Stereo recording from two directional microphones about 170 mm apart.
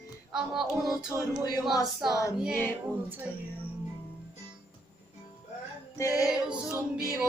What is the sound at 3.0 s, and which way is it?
Speech, 10° right (ahead or behind).